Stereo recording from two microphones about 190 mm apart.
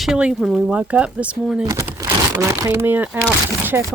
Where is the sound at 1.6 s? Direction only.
15° right (ahead or behind).